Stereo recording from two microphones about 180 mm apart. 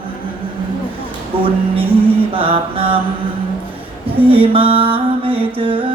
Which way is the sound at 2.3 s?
30° right (ahead or behind).